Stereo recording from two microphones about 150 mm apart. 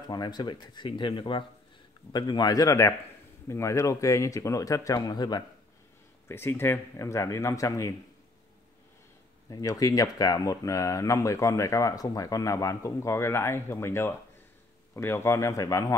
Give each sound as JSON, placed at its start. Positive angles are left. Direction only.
{"t": 0.1, "sound": "speech", "side_deg": 25}
{"t": 6.2, "sound": "speech", "side_deg": 15}
{"t": 9.5, "sound": "speech", "side_deg": 25}